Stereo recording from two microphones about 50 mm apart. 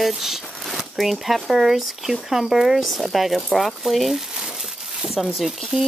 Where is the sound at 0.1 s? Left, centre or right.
Centre.